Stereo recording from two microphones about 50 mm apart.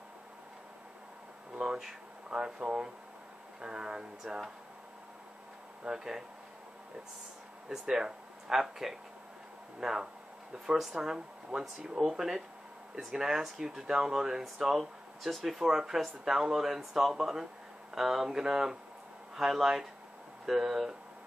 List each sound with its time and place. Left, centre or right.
1.5 s a sound: centre
2.2 s speech: centre
5.9 s speech: centre
7.8 s speech: centre